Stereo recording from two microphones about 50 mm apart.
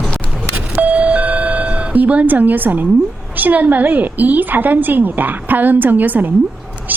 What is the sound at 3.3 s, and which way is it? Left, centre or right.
A woman's voice, right.